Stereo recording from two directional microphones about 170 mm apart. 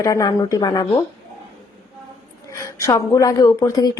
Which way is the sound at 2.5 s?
20° left (ahead or behind).